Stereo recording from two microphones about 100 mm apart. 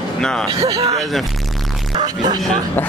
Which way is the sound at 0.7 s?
80° right.